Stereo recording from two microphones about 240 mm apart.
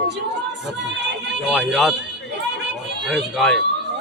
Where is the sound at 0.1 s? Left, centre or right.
Right.